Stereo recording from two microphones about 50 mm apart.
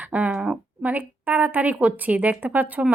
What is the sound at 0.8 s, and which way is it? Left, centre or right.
Speech, right.